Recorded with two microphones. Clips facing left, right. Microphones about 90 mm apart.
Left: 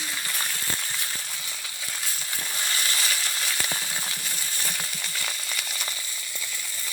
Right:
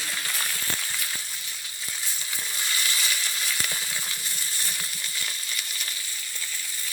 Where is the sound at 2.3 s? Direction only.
45° left (ahead or behind); by 5.9 s 80° left.